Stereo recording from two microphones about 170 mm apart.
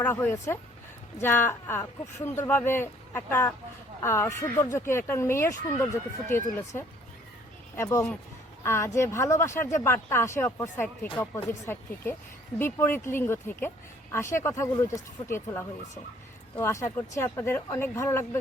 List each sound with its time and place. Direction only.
0.0 s speech: 15° left (ahead or behind)